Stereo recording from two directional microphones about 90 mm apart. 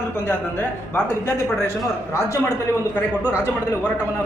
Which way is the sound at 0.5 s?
25° left (ahead or behind).